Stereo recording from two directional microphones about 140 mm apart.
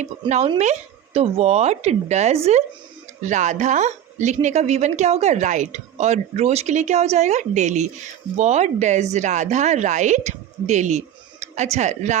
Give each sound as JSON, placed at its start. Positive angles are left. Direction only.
{"t": 0.0, "sound": "a woman's voice", "side_deg": -55}
{"t": 3.2, "sound": "a woman's voice", "side_deg": -60}